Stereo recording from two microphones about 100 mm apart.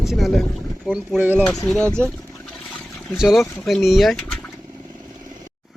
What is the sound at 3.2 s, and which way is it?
Speech, centre (ahead or behind).